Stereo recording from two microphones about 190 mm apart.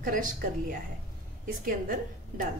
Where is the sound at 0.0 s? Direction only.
45° right (ahead or behind).